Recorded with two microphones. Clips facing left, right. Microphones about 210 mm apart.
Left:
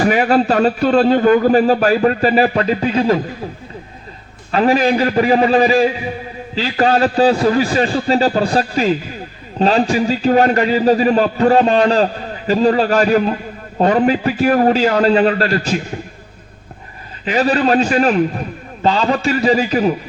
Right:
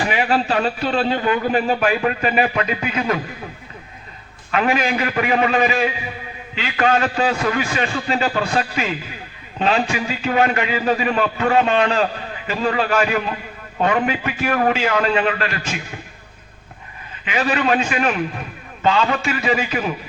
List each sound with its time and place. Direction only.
0.0 s a man's voice: 40° left (ahead or behind)
4.5 s a man's voice: 35° left (ahead or behind)
17.2 s a man's voice: 35° left (ahead or behind)